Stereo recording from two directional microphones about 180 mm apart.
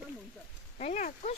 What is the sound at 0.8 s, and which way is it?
Speech, 40° left (ahead or behind).